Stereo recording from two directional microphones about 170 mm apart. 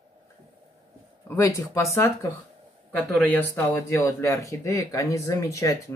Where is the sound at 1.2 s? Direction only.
15° left (ahead or behind).